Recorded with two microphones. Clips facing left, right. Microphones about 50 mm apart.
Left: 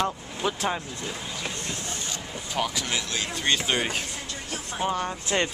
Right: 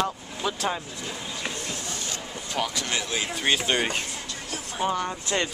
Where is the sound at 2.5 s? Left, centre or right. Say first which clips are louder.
Even; centre.